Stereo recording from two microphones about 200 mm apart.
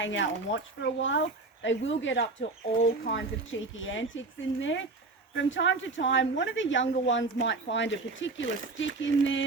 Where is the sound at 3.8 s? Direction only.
70° left (ahead or behind).